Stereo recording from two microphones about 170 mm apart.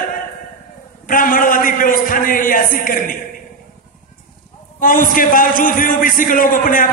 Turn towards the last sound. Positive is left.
turn(degrees=55)  # may be behind; listen again after turning